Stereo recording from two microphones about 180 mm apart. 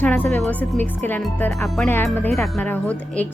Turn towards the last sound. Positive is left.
turn(degrees=10)  # may be behind; listen again after turning